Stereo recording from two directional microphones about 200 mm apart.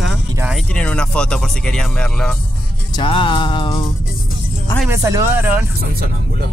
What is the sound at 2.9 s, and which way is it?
Music, 25° left (ahead or behind).